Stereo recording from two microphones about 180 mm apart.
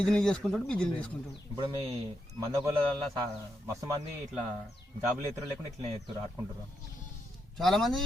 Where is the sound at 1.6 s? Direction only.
35° right (ahead or behind).